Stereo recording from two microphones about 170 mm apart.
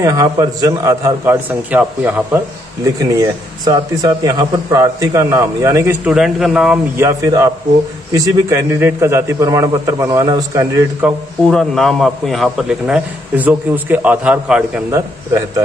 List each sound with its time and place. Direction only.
0.0 s a man's voice: 20° right (ahead or behind)
3.2 s speech: 25° right (ahead or behind)
6.0 s a man's voice: 5° right (ahead or behind)
7.0 s a man's voice: 20° right (ahead or behind)
11.4 s a man's voice: centre (ahead or behind); by 15.6 s 15° right (ahead or behind)